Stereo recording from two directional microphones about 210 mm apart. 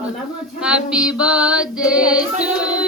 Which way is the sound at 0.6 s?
5° right (ahead or behind).